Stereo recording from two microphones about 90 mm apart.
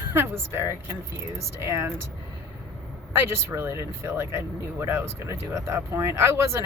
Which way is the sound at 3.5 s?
30° right (ahead or behind).